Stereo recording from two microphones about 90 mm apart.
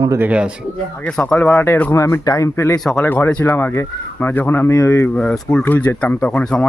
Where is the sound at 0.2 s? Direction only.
15° right (ahead or behind).